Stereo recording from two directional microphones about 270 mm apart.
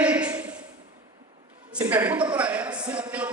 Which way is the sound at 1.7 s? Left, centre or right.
Centre.